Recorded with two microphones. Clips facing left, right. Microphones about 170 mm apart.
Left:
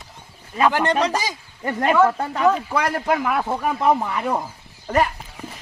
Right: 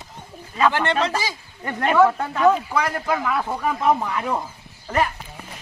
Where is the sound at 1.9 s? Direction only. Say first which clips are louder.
Right 1 dB; 5° left (ahead or behind).